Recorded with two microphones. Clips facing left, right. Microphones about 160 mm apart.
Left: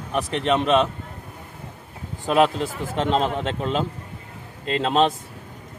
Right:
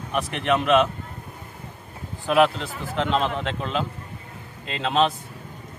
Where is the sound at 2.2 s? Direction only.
40° left (ahead or behind).